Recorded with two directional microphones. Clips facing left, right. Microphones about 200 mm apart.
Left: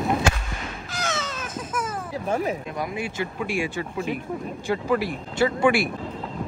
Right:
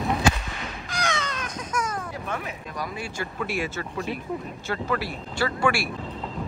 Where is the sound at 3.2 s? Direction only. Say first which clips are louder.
Left 1 dB; 15° left (ahead or behind).